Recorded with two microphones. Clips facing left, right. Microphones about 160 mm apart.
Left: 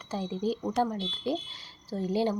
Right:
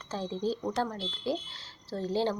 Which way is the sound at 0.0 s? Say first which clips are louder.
Left 1 dB; 10° left (ahead or behind).